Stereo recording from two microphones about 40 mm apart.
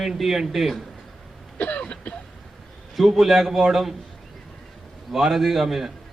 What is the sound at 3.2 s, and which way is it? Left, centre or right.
Speech, centre.